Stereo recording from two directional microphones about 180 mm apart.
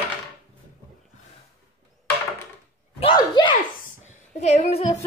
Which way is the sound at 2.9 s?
25° left (ahead or behind).